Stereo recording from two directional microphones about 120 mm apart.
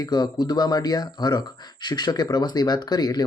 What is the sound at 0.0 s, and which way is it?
Speech, 35° left (ahead or behind).